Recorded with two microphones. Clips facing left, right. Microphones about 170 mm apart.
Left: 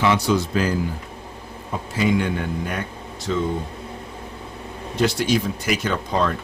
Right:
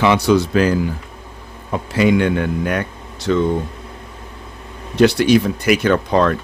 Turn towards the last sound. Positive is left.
turn(degrees=-65)  # may be behind; listen again after turning